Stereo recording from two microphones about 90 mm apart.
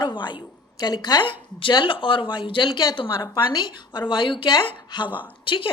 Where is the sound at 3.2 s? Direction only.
45° left (ahead or behind).